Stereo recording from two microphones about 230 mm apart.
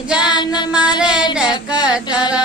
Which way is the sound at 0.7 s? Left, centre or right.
Centre.